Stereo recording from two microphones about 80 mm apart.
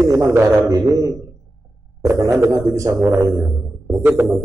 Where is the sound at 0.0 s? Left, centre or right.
Right.